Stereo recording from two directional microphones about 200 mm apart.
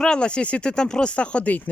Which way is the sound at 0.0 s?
5° left (ahead or behind).